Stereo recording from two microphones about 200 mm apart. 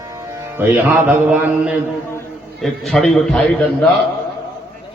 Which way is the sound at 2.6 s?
Centre (ahead or behind).